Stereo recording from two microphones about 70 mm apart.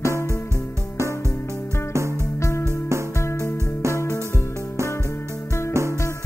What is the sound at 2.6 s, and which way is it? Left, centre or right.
Music, right.